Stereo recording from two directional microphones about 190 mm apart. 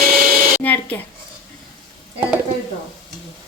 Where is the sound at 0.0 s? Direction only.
50° right (ahead or behind).